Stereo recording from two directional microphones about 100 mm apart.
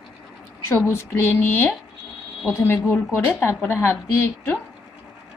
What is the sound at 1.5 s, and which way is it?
A woman's voice, 20° left (ahead or behind).